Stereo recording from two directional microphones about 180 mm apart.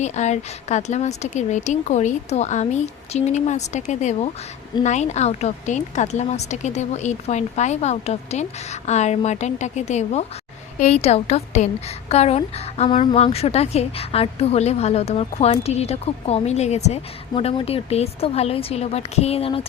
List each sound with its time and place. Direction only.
0.0 s a woman's voice: 40° left (ahead or behind)